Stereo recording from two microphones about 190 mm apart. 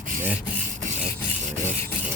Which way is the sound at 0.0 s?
45° right (ahead or behind).